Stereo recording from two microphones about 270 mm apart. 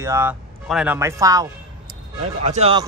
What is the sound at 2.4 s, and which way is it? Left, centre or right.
Speech, right.